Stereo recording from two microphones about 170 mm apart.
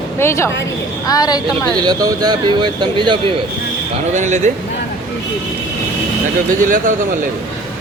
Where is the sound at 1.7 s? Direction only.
20° right (ahead or behind).